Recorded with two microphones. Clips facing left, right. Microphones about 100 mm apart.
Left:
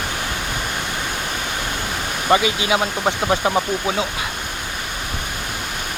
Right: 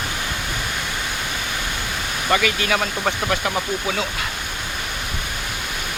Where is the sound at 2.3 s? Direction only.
20° left (ahead or behind).